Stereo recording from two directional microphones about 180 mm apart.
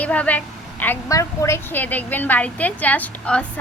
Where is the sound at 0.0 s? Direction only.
10° left (ahead or behind).